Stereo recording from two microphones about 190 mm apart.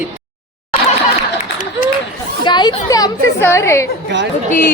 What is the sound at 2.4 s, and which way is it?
A woman's voice, 25° left (ahead or behind).